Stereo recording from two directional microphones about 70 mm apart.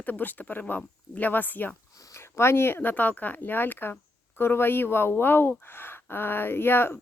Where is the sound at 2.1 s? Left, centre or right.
Left.